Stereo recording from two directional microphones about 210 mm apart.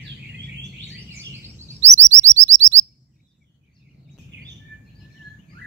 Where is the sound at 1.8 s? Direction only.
35° right (ahead or behind).